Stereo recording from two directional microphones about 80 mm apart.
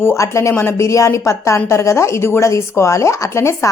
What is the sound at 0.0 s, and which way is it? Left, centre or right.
A woman's voice, left.